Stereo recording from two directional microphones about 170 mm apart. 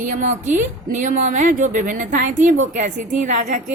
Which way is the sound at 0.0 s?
50° right (ahead or behind).